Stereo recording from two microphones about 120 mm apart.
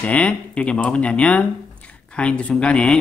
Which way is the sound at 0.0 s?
10° left (ahead or behind).